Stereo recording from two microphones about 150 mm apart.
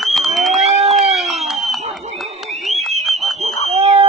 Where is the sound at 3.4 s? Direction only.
45° right (ahead or behind).